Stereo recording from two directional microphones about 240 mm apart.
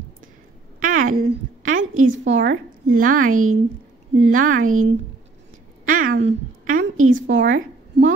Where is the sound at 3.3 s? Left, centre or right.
Right.